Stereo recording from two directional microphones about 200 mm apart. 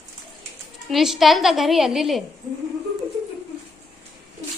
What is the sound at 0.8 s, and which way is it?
A woman's voice, centre (ahead or behind).